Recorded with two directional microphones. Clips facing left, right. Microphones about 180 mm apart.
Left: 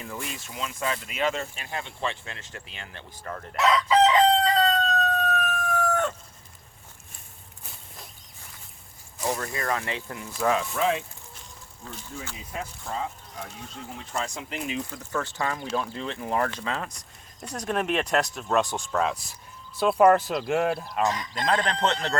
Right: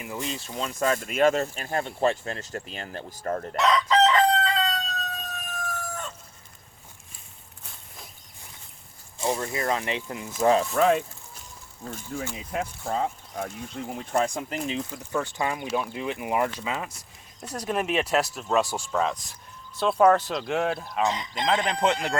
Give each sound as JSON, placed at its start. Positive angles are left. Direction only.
{"t": 0.0, "sound": "speech", "side_deg": -20}
{"t": 3.5, "sound": "chicken", "side_deg": 0}
{"t": 4.4, "sound": "chicken", "side_deg": 40}
{"t": 9.1, "sound": "speech", "side_deg": -25}
{"t": 10.4, "sound": "speech", "side_deg": -30}
{"t": 10.8, "sound": "speech", "side_deg": -50}
{"t": 14.7, "sound": "speech", "side_deg": -20}
{"t": 21.1, "sound": "speech", "side_deg": -20}
{"t": 21.4, "sound": "speech", "side_deg": -5}